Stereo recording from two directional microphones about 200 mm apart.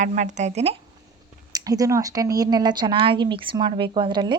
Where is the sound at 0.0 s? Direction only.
35° right (ahead or behind).